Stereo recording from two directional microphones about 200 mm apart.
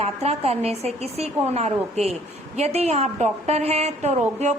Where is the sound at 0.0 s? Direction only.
30° right (ahead or behind).